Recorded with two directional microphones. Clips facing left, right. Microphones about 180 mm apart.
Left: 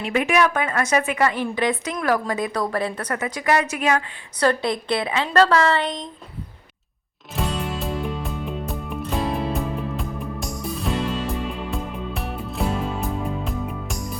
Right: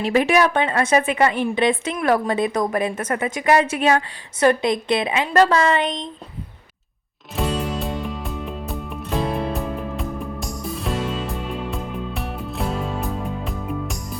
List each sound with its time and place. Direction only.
0.0 s a woman's voice: 35° right (ahead or behind)
4.4 s a woman's voice: 20° right (ahead or behind)
7.3 s music: centre (ahead or behind)